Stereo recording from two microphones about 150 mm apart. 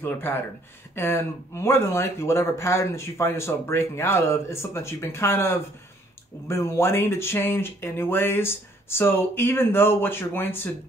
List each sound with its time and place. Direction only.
0.0 s speech: 15° left (ahead or behind)